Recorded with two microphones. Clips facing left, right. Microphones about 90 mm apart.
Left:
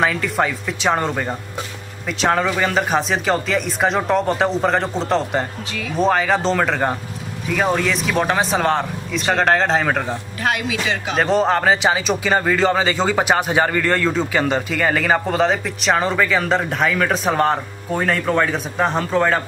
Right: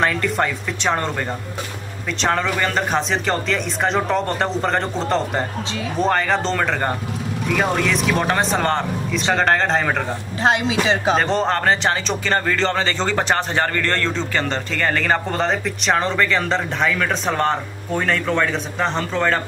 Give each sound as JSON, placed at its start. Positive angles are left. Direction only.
{"t": 0.0, "sound": "speech", "side_deg": 5}
{"t": 2.2, "sound": "speech", "side_deg": 5}
{"t": 10.4, "sound": "speech", "side_deg": -25}
{"t": 11.1, "sound": "speech", "side_deg": 5}